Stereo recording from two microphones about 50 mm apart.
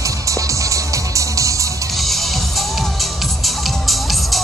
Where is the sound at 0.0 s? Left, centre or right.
Right.